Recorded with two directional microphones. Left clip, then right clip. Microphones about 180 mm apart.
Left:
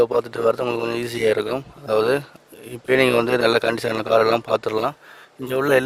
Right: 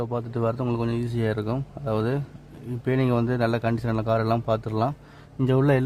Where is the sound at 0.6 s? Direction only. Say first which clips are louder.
Left 5 dB; 25° left (ahead or behind).